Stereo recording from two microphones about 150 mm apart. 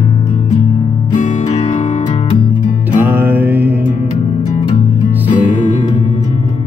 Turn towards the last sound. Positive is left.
turn(degrees=55)  # may be behind; listen again after turning